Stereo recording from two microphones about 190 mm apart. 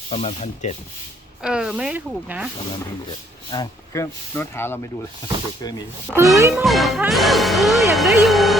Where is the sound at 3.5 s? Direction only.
20° left (ahead or behind).